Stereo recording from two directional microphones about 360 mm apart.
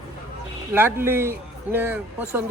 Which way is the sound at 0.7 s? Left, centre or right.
Centre.